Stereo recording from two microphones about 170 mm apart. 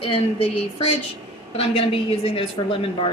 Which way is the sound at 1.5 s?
35° left (ahead or behind).